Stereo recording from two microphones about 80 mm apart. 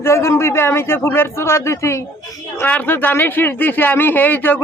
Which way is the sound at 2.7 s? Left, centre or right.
Left.